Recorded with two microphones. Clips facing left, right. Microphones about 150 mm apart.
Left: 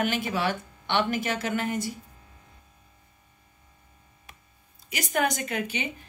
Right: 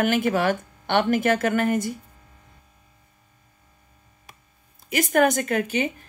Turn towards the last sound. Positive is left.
turn(degrees=-45)  # may be behind; listen again after turning